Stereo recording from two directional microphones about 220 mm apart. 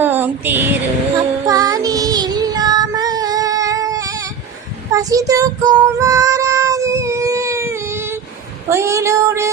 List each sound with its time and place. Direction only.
0.0 s a sound: 10° right (ahead or behind)
1.5 s child singing: 15° right (ahead or behind)
8.7 s female singing: 15° right (ahead or behind)